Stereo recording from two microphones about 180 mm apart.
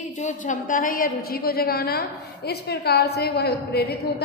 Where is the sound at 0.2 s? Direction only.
45° left (ahead or behind).